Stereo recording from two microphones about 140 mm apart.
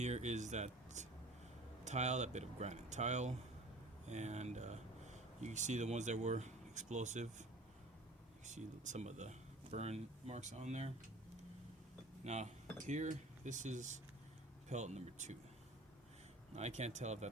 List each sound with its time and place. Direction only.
0.0 s speech: 55° right (ahead or behind)
8.4 s speech: 55° right (ahead or behind)
12.2 s speech: 55° right (ahead or behind)
16.6 s speech: 55° right (ahead or behind)